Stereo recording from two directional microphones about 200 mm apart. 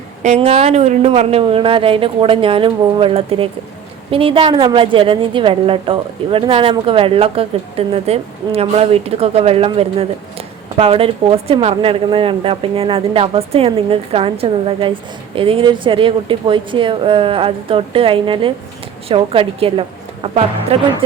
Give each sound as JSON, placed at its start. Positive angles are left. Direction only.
{"t": 0.2, "sound": "a woman's voice", "side_deg": -35}